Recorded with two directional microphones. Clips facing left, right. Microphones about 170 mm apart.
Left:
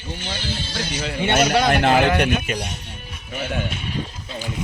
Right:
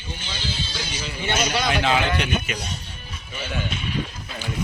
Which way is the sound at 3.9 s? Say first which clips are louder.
Even; 35° left (ahead or behind).